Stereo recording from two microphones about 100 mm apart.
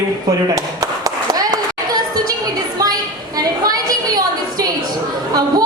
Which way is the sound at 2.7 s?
40° right (ahead or behind).